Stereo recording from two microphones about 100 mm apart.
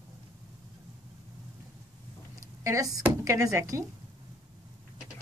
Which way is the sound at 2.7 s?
35° right (ahead or behind).